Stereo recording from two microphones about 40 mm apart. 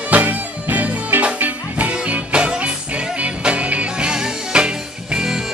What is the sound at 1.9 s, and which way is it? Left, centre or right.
Music, right.